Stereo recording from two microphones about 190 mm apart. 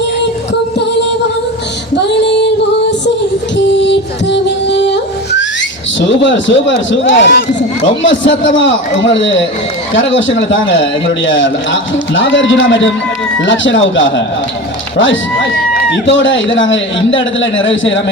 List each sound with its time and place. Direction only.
2.0 s female singing: 65° left (ahead or behind)
3.8 s music: 65° left (ahead or behind)
6.0 s a man's voice: 75° left (ahead or behind)